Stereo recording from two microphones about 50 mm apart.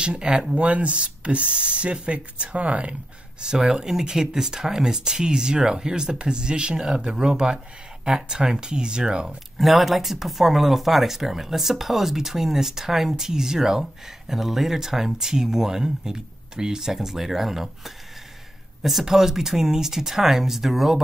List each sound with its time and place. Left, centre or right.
0.0 s speech: centre
9.6 s speech: centre